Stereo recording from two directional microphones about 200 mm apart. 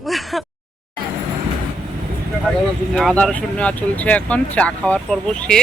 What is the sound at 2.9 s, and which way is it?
Speech, 5° left (ahead or behind).